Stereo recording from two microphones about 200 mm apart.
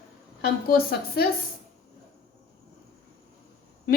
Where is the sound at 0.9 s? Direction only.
50° left (ahead or behind).